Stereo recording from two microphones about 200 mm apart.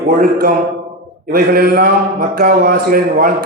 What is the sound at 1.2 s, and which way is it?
Speech, 50° right (ahead or behind).